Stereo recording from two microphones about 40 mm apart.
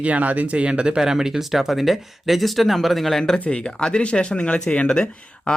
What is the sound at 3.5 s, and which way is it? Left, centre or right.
Speech, left.